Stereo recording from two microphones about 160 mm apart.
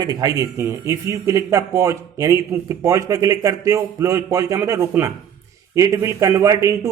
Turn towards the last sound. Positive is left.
turn(degrees=-20)  # may be behind; listen again after turning